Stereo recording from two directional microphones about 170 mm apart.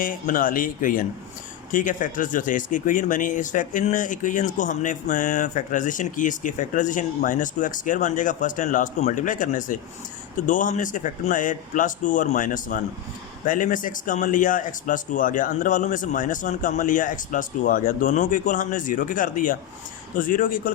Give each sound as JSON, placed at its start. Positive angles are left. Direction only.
{"t": 0.0, "sound": "speech", "side_deg": 55}